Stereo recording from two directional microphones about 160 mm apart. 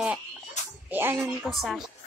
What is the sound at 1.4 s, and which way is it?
Speech, centre (ahead or behind).